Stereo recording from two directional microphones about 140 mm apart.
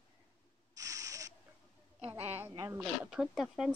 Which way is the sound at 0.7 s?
25° right (ahead or behind).